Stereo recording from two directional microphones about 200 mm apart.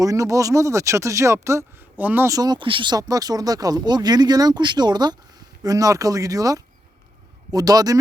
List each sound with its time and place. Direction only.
0.0 s a man's voice: 15° right (ahead or behind)